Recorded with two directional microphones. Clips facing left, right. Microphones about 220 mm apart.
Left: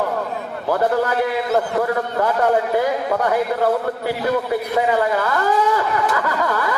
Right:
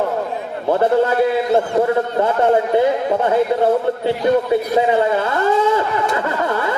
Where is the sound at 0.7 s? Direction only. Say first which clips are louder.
Right 4 dB; 25° right (ahead or behind).